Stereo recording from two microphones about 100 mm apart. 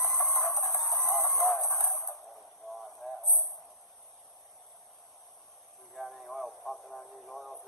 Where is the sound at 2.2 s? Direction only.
Centre (ahead or behind).